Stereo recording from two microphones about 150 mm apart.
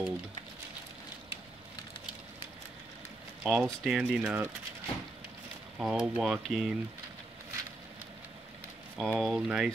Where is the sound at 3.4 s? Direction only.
5° right (ahead or behind).